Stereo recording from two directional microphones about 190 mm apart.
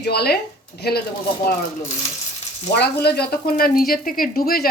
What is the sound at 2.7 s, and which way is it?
Speech, 60° left (ahead or behind).